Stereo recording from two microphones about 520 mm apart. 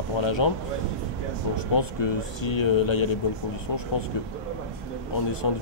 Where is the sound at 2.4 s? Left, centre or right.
Left.